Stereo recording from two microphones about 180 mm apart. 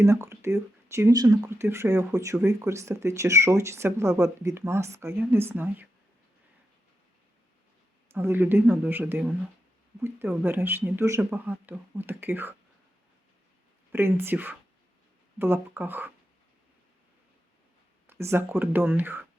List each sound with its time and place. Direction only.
0.0 s speech: 15° right (ahead or behind)
8.1 s speech: 10° right (ahead or behind)
13.9 s speech: 15° right (ahead or behind)
18.0 s speech: 15° right (ahead or behind)